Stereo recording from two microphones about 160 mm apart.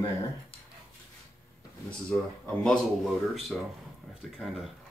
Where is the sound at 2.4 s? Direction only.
5° left (ahead or behind).